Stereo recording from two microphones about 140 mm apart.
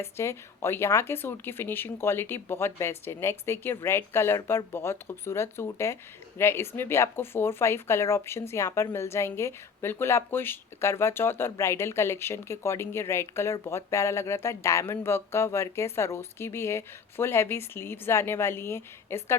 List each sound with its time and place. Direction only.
0.0 s speech: 20° left (ahead or behind)